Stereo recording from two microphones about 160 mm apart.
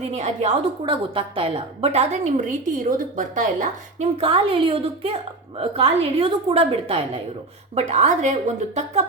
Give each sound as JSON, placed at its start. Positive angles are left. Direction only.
{"t": 0.0, "sound": "a woman's voice", "side_deg": -45}
{"t": 0.9, "sound": "a woman's voice", "side_deg": -35}
{"t": 4.2, "sound": "a woman's voice", "side_deg": -35}